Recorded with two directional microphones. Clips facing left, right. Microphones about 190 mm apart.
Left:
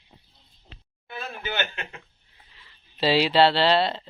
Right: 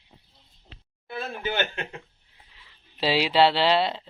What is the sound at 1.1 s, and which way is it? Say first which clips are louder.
Speech: right 3 dB; 30° right (ahead or behind).